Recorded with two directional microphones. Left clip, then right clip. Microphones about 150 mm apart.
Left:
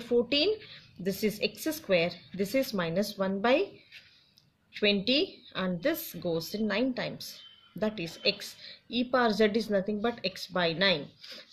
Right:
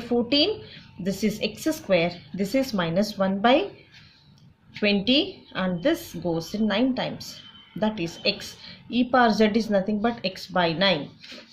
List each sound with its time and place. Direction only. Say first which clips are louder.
0.0 s speech: right 4 dB; 40° left (ahead or behind)
4.7 s speech: right 4 dB; 35° left (ahead or behind)